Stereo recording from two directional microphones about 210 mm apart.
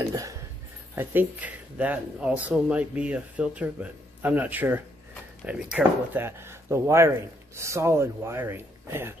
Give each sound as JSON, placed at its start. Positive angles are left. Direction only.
{"t": 0.0, "sound": "speech", "side_deg": -15}